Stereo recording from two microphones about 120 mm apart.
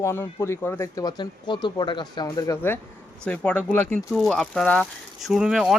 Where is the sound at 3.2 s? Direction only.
10° left (ahead or behind).